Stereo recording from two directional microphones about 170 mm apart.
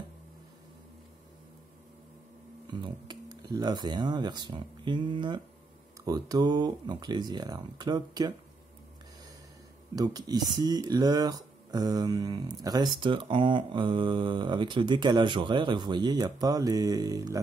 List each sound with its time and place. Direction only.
2.7 s speech: 25° right (ahead or behind)
9.9 s speech: 25° right (ahead or behind)